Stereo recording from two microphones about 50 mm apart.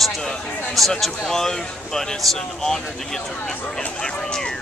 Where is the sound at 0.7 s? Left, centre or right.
Centre.